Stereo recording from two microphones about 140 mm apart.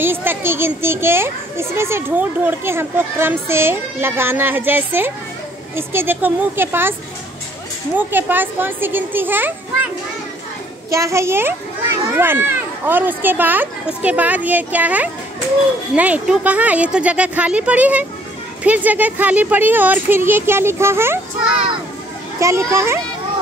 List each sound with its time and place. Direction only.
0.0 s a child's voice: 15° right (ahead or behind)
8.1 s a child's voice: 15° right (ahead or behind)
10.9 s a child's voice: 20° right (ahead or behind)
22.4 s a child's voice: 20° right (ahead or behind)